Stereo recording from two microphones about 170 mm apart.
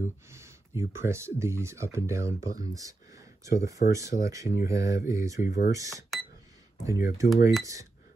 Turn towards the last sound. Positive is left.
turn(degrees=-20)  # may be behind; listen again after turning